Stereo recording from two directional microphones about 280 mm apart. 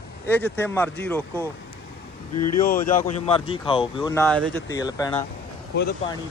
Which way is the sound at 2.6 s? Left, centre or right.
Left.